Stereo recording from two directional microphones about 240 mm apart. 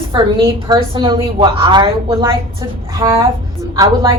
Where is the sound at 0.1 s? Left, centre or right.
Centre.